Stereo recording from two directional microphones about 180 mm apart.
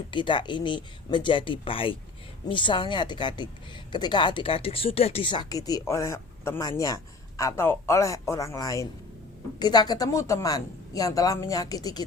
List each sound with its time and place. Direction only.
0.1 s a man's voice: 25° left (ahead or behind)